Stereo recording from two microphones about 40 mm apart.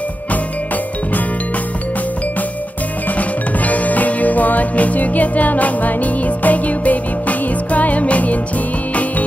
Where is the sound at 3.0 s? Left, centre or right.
Left.